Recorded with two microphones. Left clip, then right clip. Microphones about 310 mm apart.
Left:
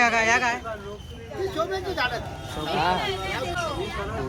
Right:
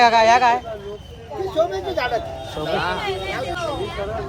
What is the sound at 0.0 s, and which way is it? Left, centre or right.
Speech, centre.